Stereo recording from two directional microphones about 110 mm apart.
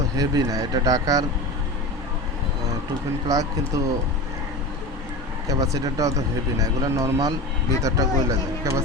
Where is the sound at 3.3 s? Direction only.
30° right (ahead or behind).